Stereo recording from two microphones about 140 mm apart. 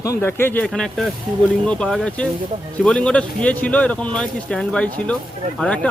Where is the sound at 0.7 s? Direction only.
Centre (ahead or behind).